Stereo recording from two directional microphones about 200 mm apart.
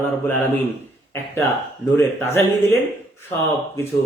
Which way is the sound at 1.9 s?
10° left (ahead or behind).